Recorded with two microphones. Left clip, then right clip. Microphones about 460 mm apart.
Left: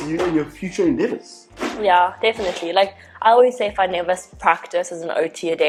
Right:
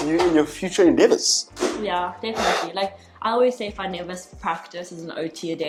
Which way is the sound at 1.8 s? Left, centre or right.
Left.